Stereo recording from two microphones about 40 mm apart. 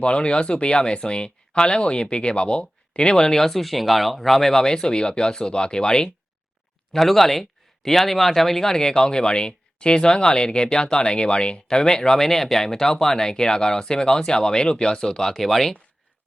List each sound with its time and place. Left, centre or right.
0.0 s speech: left
3.4 s speech: centre; by 6.1 s left
6.9 s speech: centre